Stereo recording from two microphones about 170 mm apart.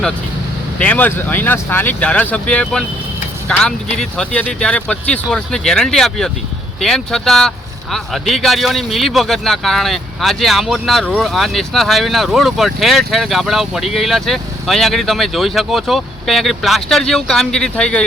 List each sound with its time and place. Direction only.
0.8 s speech: 10° left (ahead or behind)